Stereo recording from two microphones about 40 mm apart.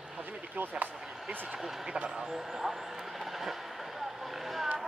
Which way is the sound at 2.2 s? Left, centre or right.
Centre.